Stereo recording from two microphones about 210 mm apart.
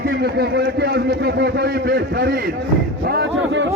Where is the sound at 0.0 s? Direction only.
50° right (ahead or behind).